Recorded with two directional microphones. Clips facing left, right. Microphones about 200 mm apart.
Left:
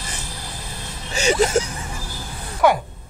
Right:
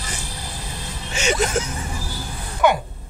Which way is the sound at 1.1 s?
30° left (ahead or behind).